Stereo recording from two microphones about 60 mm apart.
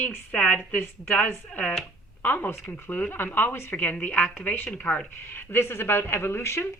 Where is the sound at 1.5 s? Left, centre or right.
Left.